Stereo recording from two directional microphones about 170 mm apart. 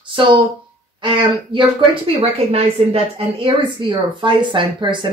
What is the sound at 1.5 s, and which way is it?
Speech, 35° right (ahead or behind).